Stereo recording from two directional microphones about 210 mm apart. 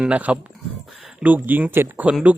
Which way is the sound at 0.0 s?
5° right (ahead or behind).